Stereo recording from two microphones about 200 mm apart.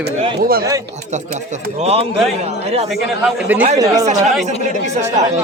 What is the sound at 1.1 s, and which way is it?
Speech, 35° right (ahead or behind).